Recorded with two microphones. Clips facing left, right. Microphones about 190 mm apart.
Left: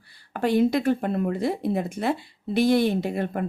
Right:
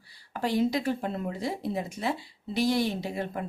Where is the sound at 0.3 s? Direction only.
60° left (ahead or behind).